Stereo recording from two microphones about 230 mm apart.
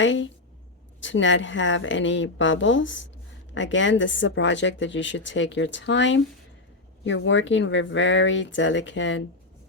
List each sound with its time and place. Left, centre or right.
0.0 s a woman's voice: left